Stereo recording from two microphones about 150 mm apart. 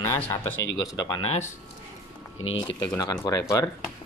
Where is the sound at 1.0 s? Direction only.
25° left (ahead or behind).